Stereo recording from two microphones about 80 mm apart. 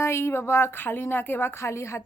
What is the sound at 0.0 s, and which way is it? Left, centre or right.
Speech, left.